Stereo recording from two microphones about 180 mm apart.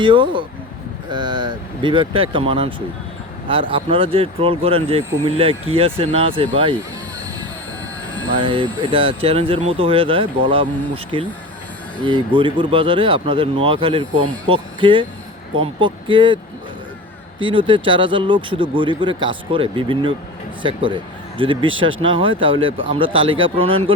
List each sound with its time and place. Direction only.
0.0 s speech: 25° right (ahead or behind)
8.4 s speech: 30° right (ahead or behind)
17.4 s speech: 30° right (ahead or behind)
21.7 s speech: 90° right
22.0 s speech: 30° right (ahead or behind)